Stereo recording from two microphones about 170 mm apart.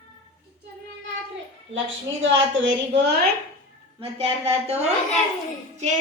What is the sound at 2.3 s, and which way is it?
Speech, 90° right.